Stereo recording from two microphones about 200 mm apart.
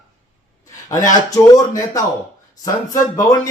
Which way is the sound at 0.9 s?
15° left (ahead or behind).